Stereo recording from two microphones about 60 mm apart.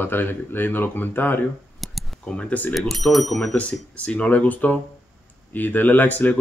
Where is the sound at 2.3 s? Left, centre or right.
Left.